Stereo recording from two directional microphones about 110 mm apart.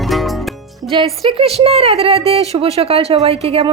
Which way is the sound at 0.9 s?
50° right (ahead or behind).